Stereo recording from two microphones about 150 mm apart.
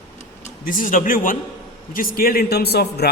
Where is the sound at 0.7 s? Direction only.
65° left (ahead or behind).